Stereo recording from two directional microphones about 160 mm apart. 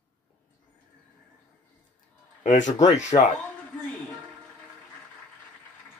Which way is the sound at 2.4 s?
50° left (ahead or behind).